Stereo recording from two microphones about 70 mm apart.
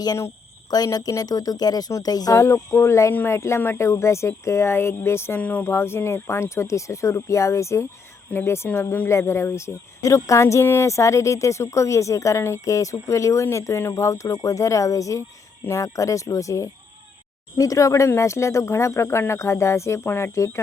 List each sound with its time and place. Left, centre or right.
0.9 s speech: left
2.4 s speech: left
5.4 s speech: left
5.6 s speech: left